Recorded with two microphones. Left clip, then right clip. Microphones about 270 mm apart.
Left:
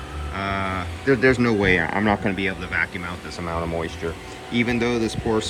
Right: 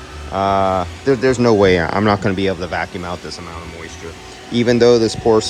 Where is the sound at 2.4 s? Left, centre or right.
Centre.